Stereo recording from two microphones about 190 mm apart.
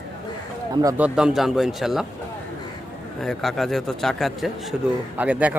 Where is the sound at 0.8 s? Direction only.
10° right (ahead or behind).